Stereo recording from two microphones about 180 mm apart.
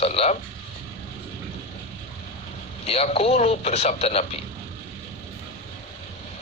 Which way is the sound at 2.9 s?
35° left (ahead or behind).